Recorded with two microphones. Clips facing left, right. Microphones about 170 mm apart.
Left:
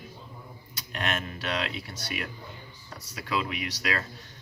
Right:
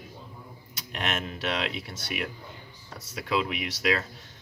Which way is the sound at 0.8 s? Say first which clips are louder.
Even; 25° right (ahead or behind).